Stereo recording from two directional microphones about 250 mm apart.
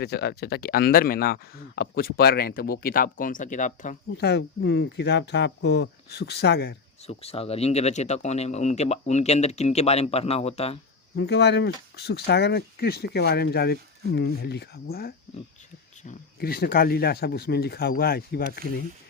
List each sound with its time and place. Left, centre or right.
0.0 s speech: left
7.1 s speech: left
11.2 s speech: left